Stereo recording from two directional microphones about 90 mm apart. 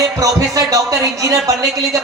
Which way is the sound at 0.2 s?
40° right (ahead or behind).